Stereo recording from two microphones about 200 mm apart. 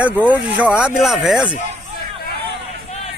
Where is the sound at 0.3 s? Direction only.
5° right (ahead or behind).